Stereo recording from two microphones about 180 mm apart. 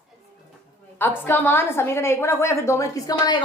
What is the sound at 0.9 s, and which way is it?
A woman's voice, 10° left (ahead or behind).